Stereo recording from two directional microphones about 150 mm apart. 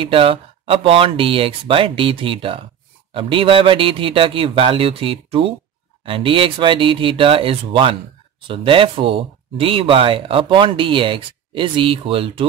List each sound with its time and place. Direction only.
0.0 s speech: 35° right (ahead or behind)